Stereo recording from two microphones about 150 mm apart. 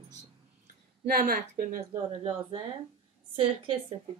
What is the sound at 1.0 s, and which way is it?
Speech, 65° right (ahead or behind).